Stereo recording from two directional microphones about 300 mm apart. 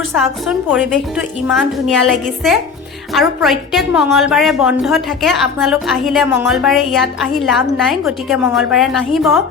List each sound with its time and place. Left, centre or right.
0.2 s a woman's voice: centre